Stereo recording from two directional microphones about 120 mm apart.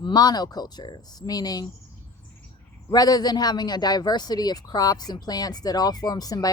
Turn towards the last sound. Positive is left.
turn(degrees=30)  # may be behind; listen again after turning